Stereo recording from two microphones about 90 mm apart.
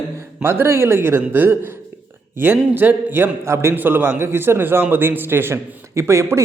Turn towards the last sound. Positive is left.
turn(degrees=-30)  # may be behind; listen again after turning